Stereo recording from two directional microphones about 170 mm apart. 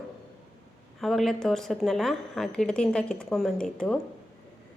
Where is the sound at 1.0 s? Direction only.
Centre (ahead or behind).